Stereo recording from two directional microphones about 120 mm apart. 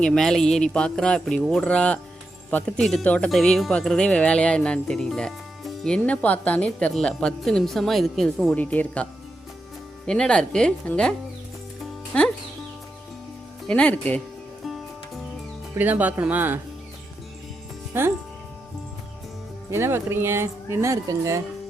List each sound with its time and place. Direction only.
0.0 s speech: 5° left (ahead or behind)
8.5 s speech: 15° left (ahead or behind)
10.1 s speech: 5° left (ahead or behind)
12.1 s speech: 10° left (ahead or behind)
13.7 s speech: 10° left (ahead or behind)
15.7 s speech: 15° right (ahead or behind)
17.9 s speech: 20° right (ahead or behind)
19.7 s speech: 20° right (ahead or behind)